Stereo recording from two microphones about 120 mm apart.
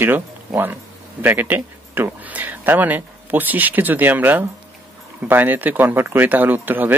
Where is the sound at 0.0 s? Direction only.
15° right (ahead or behind).